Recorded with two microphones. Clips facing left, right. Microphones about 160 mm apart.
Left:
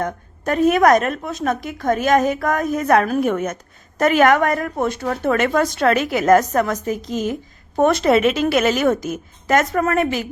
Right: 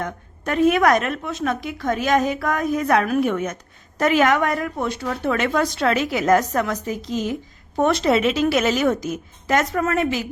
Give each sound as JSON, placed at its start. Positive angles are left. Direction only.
{"t": 0.0, "sound": "a woman's voice", "side_deg": 40}